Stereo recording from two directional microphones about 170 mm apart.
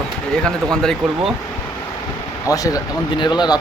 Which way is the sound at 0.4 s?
5° left (ahead or behind).